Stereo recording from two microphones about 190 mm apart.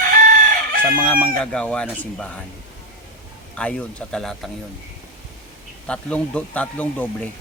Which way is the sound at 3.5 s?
5° left (ahead or behind).